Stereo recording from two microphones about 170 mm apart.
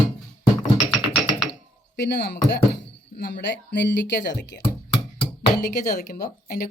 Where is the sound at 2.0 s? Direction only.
75° left (ahead or behind).